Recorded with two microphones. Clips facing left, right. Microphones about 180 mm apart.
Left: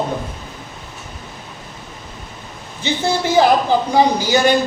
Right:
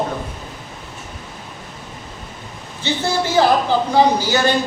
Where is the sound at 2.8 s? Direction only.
15° left (ahead or behind).